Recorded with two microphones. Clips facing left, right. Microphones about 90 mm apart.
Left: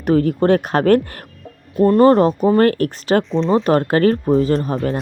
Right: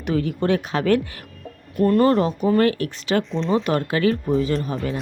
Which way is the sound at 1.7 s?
30° left (ahead or behind).